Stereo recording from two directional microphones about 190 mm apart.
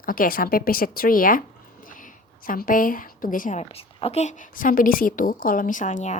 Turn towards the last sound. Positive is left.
turn(degrees=40)  # may be behind; listen again after turning